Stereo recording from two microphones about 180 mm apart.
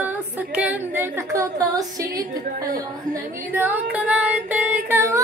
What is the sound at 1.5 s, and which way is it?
Speech, 20° right (ahead or behind).